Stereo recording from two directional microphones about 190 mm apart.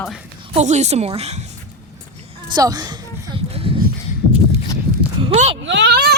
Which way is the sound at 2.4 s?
20° right (ahead or behind).